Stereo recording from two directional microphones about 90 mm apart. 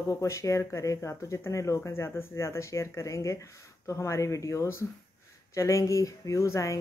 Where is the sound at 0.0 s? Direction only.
35° left (ahead or behind).